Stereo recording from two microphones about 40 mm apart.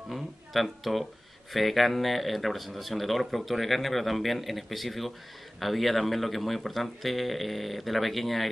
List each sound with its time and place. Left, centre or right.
0.1 s speech: centre